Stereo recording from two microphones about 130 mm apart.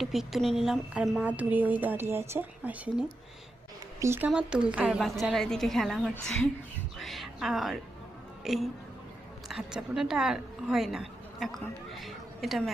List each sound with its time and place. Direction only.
0.0 s speech: centre (ahead or behind)
4.0 s speech: 20° right (ahead or behind)
4.3 s a woman's voice: 5° right (ahead or behind)
11.9 s a sound: centre (ahead or behind)